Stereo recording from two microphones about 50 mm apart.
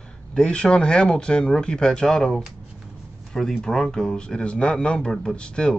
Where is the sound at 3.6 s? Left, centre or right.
Centre.